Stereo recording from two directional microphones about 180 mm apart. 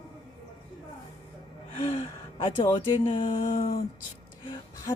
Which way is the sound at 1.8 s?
35° left (ahead or behind).